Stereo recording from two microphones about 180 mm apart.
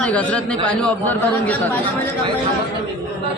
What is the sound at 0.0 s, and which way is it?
A man's voice, 5° left (ahead or behind).